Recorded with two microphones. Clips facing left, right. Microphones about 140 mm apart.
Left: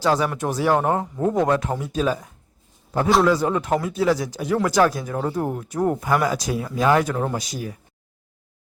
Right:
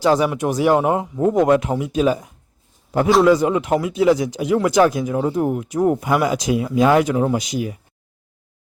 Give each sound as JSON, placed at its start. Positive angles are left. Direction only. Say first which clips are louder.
{"t": 0.0, "sound": "speech", "louder": "right 4 dB", "side_deg": -20}